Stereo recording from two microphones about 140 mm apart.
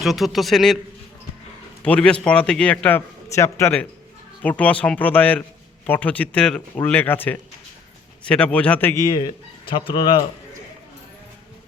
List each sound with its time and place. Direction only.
0.0 s a man's voice: centre (ahead or behind)
1.8 s speech: 10° left (ahead or behind)
3.2 s a man's voice: 20° left (ahead or behind)
4.4 s speech: 10° left (ahead or behind)
9.0 s speech: 30° left (ahead or behind)